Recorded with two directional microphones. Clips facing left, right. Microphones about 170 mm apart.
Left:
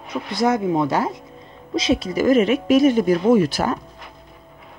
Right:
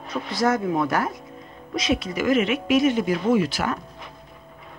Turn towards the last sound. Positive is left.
turn(degrees=40)  # may be behind; listen again after turning